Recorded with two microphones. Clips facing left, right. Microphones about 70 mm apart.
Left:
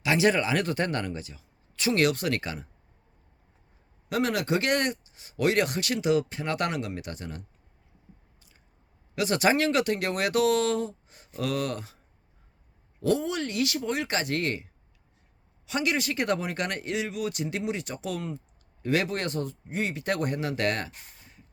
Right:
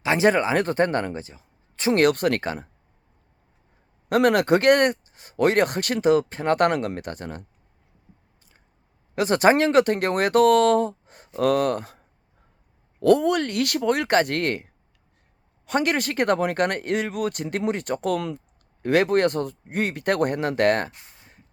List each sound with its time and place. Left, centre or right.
0.0 s speech: right
4.1 s speech: right
9.1 s speech: right
18.8 s speech: right